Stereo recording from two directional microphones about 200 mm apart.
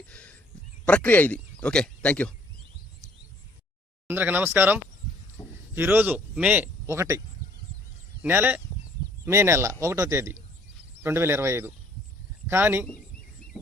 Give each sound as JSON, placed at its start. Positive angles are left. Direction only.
{"t": 0.1, "sound": "a sound", "side_deg": 5}
{"t": 0.9, "sound": "speech", "side_deg": 5}
{"t": 4.0, "sound": "speech", "side_deg": -10}
{"t": 5.4, "sound": "a sound", "side_deg": 30}
{"t": 5.7, "sound": "speech", "side_deg": -10}
{"t": 8.2, "sound": "speech", "side_deg": -10}